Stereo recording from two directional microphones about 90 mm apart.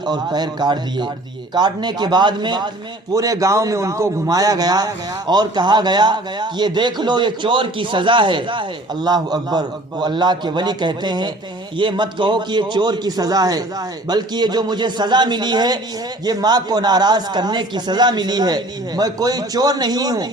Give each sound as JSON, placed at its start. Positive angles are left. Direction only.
{"t": 0.0, "sound": "speech", "side_deg": -50}
{"t": 3.1, "sound": "a man's voice", "side_deg": -40}